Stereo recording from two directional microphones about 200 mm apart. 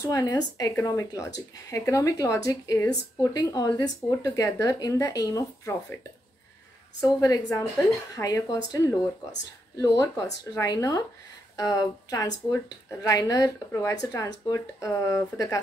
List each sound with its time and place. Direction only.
0.0 s a woman's voice: 20° left (ahead or behind)
7.0 s a woman's voice: 15° left (ahead or behind)